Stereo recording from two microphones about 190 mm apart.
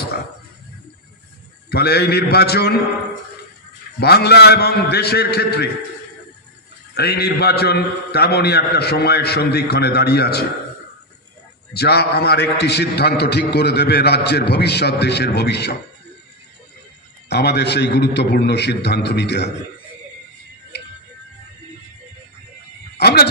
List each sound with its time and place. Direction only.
1.7 s a man's voice: 55° left (ahead or behind)
4.0 s a man's voice: 55° left (ahead or behind)
7.0 s a man's voice: 55° left (ahead or behind)
11.7 s a man's voice: 60° left (ahead or behind)
17.3 s a man's voice: 60° left (ahead or behind)
22.9 s speech: 60° left (ahead or behind)